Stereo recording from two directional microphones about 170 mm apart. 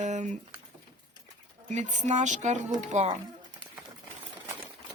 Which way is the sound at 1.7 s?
45° right (ahead or behind).